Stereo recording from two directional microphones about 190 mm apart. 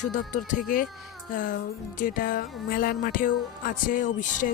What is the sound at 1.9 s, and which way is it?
Speech, 45° left (ahead or behind).